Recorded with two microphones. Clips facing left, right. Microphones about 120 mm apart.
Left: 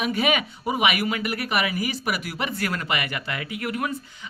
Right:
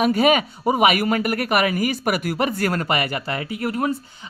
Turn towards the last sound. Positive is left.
turn(degrees=-35)  # may be behind; listen again after turning